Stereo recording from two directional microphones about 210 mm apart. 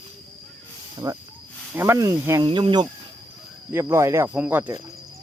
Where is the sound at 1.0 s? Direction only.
15° right (ahead or behind).